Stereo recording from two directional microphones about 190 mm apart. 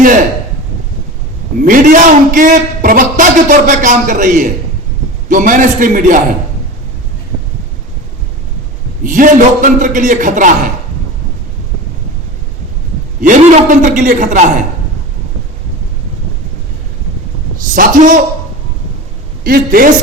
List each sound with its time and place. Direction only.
1.6 s a man's voice: 45° right (ahead or behind)
9.0 s a man's voice: 45° right (ahead or behind)
13.2 s a man's voice: 40° right (ahead or behind)
17.7 s a man's voice: 45° right (ahead or behind)
19.5 s a man's voice: 50° right (ahead or behind)